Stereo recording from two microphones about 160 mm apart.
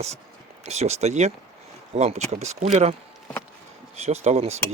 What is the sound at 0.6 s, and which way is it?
Speech, 45° right (ahead or behind).